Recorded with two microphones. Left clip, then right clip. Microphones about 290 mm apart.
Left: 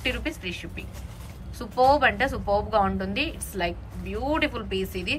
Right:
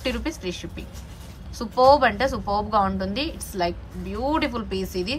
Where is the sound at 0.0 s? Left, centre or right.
Centre.